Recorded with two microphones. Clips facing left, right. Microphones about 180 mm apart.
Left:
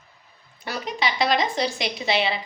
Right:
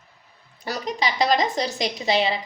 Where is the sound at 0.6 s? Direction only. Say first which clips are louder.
Right 1 dB; 40° right (ahead or behind).